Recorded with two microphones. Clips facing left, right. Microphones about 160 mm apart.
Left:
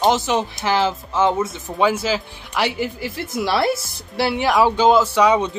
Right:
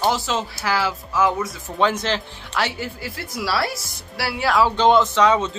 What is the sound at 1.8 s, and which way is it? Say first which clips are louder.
Speech: left 2 dB; 10° left (ahead or behind).